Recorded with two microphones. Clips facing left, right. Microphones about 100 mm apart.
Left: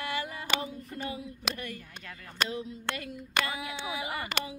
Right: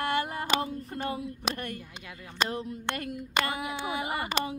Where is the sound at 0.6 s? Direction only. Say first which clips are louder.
Right 4 dB; 55° right (ahead or behind).